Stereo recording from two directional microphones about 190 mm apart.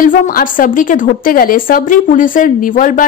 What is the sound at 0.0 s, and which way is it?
A woman's voice, 45° left (ahead or behind).